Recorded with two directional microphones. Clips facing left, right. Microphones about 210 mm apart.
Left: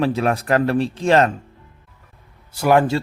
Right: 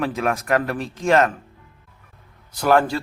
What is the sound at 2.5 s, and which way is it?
Speech, 10° left (ahead or behind).